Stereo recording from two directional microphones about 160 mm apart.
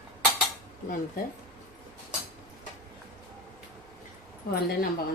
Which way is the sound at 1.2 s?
65° left (ahead or behind).